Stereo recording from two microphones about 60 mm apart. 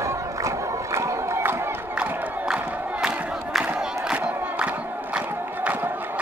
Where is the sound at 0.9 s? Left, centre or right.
Right.